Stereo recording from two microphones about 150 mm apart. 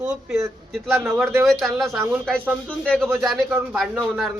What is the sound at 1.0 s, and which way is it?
Speech, 15° right (ahead or behind).